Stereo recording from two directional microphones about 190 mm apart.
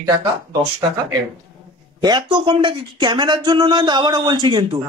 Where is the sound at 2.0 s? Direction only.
25° right (ahead or behind).